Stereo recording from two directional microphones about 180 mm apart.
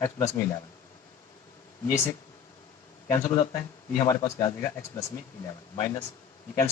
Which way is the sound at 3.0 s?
20° left (ahead or behind).